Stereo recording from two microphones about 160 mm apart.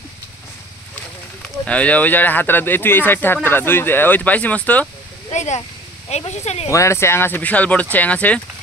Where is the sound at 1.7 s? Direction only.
10° left (ahead or behind).